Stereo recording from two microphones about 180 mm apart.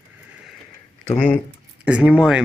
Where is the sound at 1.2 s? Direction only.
5° left (ahead or behind).